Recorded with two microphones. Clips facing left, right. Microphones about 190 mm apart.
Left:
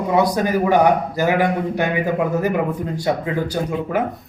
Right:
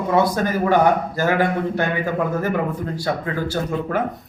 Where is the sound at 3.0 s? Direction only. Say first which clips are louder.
Left 4 dB; 20° left (ahead or behind).